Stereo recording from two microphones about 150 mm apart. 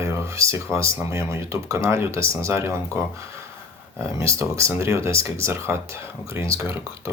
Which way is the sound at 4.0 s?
20° right (ahead or behind).